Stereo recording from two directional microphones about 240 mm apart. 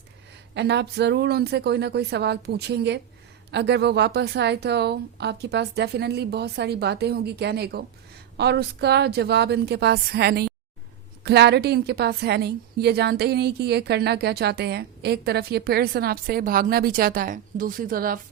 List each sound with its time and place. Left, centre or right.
0.5 s a woman's voice: right